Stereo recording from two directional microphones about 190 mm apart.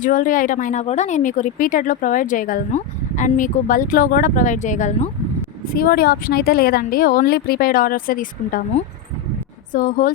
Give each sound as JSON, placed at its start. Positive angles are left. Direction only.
{"t": 0.0, "sound": "speech", "side_deg": 45}
{"t": 5.7, "sound": "speech", "side_deg": 50}